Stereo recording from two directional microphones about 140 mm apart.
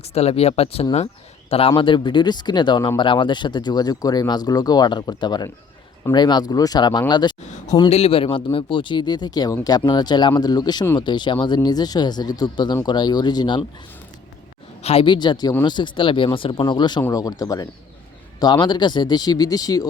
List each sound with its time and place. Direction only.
0.0 s speech: 50° left (ahead or behind); by 7.3 s 30° left (ahead or behind)
7.4 s a sound: 60° left (ahead or behind)
7.9 s speech: 50° left (ahead or behind); by 13.7 s 30° left (ahead or behind)
14.8 s speech: 50° left (ahead or behind)
15.0 s speech: 35° left (ahead or behind)